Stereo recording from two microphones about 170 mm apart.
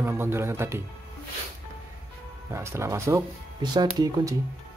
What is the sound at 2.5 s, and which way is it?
A man's voice, 15° right (ahead or behind).